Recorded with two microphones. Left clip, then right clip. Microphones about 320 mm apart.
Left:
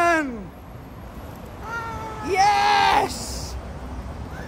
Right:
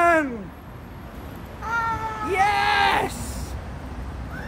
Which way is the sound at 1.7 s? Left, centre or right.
Right.